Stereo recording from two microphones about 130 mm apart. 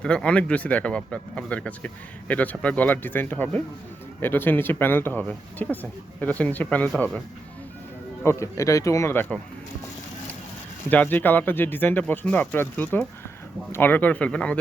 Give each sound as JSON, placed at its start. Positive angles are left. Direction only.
{"t": 0.0, "sound": "speech", "side_deg": 5}
{"t": 8.2, "sound": "speech", "side_deg": 20}
{"t": 10.8, "sound": "speech", "side_deg": 15}